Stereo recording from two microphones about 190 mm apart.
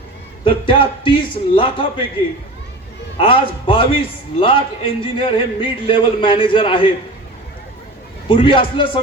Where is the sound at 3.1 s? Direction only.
30° left (ahead or behind).